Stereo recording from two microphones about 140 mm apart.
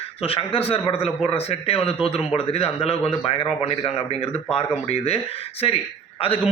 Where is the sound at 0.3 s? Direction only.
45° left (ahead or behind).